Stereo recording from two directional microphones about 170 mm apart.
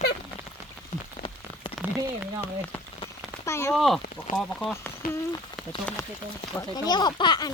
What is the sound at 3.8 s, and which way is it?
Speech, centre (ahead or behind).